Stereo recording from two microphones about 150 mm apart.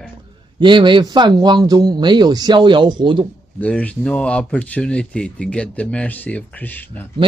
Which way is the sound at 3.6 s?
10° left (ahead or behind).